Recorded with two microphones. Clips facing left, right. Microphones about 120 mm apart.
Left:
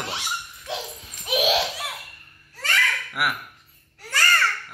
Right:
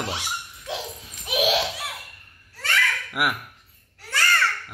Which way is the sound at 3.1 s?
20° right (ahead or behind).